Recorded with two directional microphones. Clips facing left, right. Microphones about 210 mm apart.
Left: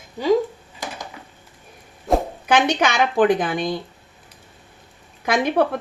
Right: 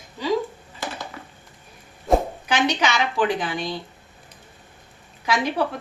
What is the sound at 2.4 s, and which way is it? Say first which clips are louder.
Speech: left 4 dB; 55° left (ahead or behind).